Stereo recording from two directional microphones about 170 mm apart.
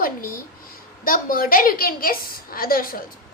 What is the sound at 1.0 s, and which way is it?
A woman's voice, 55° left (ahead or behind).